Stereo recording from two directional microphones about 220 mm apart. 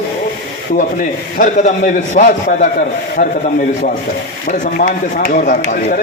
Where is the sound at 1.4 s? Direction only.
35° left (ahead or behind).